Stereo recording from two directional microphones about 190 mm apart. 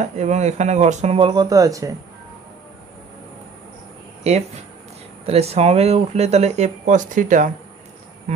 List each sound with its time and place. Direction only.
0.0 s speech: 40° right (ahead or behind); by 1.9 s 20° right (ahead or behind)
5.2 s speech: 30° right (ahead or behind)